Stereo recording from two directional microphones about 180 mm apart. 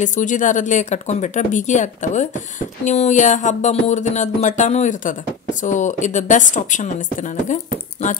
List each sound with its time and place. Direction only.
0.0 s speech: 45° left (ahead or behind)